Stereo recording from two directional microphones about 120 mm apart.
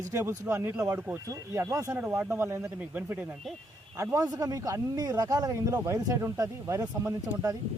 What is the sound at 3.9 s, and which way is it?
Speech, 25° right (ahead or behind).